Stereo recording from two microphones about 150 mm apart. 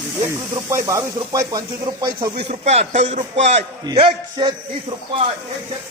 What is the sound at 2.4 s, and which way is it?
A man's voice, 45° right (ahead or behind).